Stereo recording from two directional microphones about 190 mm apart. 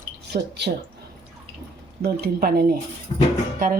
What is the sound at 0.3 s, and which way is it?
Speech, 60° right (ahead or behind).